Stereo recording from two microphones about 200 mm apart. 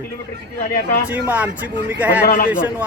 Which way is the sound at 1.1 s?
10° right (ahead or behind).